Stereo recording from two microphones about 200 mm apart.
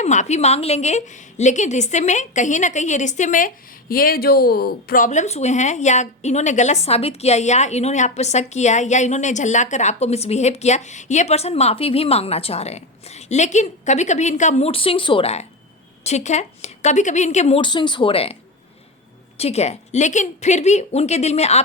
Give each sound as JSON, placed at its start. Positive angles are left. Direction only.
{"t": 0.0, "sound": "a woman's voice", "side_deg": 35}
{"t": 19.4, "sound": "a woman's voice", "side_deg": 30}